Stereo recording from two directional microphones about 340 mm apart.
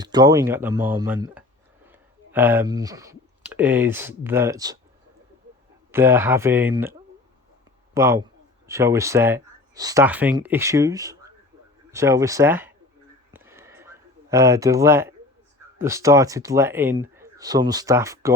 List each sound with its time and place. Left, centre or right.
0.0 s speech: centre
5.9 s speech: centre
7.9 s speech: centre
13.3 s a sound: centre
15.8 s speech: centre